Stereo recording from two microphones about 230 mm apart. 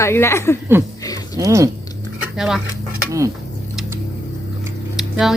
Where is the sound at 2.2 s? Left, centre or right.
Centre.